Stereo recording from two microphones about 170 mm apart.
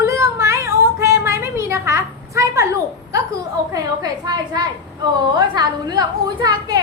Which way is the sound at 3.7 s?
25° right (ahead or behind).